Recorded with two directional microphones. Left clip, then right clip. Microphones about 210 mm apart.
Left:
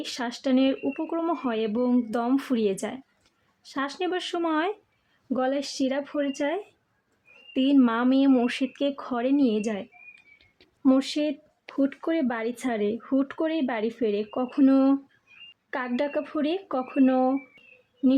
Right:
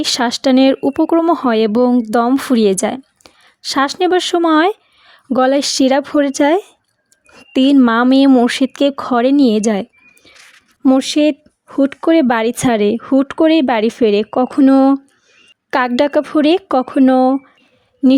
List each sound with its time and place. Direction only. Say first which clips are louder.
0.0 s speech: right 16 dB; 45° right (ahead or behind)
10.8 s speech: right 11 dB; 40° right (ahead or behind)